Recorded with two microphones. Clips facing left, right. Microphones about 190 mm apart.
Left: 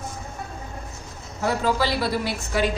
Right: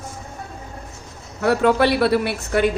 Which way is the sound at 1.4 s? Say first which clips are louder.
Right 6 dB; 65° right (ahead or behind).